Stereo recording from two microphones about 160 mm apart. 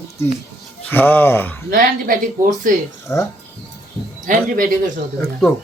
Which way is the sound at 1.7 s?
60° right (ahead or behind).